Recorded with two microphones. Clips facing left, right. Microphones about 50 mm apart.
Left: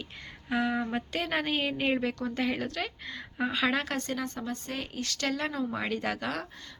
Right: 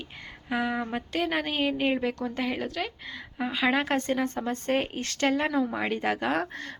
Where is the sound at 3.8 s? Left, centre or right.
Right.